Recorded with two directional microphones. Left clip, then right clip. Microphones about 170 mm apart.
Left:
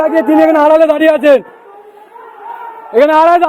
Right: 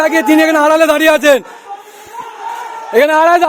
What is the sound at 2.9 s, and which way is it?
Speech, 30° right (ahead or behind).